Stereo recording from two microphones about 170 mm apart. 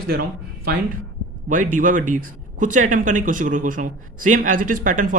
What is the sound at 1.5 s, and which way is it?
Speech, 50° right (ahead or behind).